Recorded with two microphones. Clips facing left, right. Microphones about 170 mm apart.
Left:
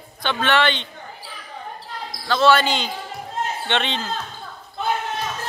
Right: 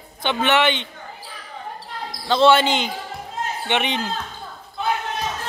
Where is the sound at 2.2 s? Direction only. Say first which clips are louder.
Right 2 dB; 25° right (ahead or behind).